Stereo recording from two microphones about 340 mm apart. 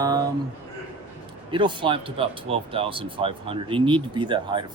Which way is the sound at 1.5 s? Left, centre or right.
Centre.